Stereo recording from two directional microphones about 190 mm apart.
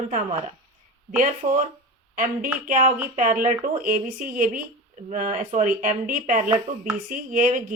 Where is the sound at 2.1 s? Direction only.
45° right (ahead or behind).